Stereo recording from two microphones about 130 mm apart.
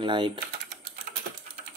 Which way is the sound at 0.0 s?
40° right (ahead or behind).